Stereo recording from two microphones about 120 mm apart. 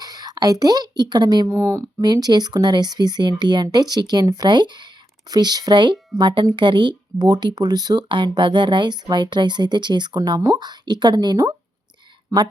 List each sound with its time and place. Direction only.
0.0 s speech: 35° right (ahead or behind)
1.5 s speech: 20° right (ahead or behind)
2.0 s speech: 35° right (ahead or behind)